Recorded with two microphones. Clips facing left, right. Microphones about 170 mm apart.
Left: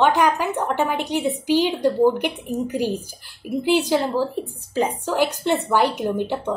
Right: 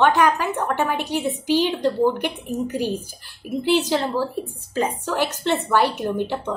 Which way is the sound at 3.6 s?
15° left (ahead or behind).